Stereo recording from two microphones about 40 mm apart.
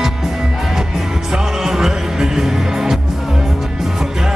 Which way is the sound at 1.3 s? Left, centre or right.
Centre.